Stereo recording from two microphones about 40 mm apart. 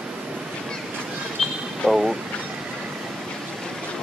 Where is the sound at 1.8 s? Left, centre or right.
Centre.